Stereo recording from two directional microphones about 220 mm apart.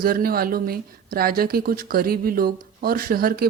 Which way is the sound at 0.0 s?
40° right (ahead or behind).